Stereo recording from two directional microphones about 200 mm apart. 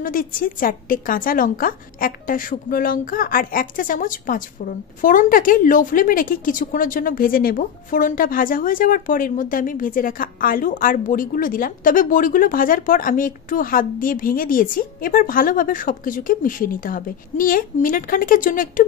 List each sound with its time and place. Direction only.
0.0 s a woman's voice: 45° left (ahead or behind)